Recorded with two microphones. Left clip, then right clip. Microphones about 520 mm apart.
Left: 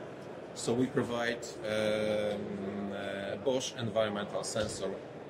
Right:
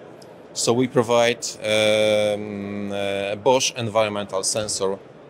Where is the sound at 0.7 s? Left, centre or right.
Right.